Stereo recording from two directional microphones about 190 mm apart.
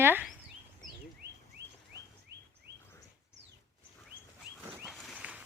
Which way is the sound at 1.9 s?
20° left (ahead or behind).